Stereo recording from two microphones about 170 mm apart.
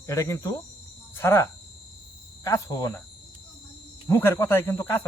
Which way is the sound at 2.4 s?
20° left (ahead or behind).